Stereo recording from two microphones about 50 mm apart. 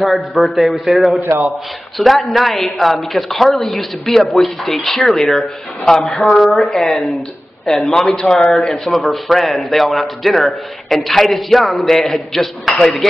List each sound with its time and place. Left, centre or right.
0.4 s a man's voice: centre
1.2 s a man's voice: right
2.0 s a man's voice: centre